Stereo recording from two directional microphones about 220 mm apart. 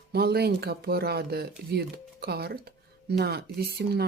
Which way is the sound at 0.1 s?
45° right (ahead or behind).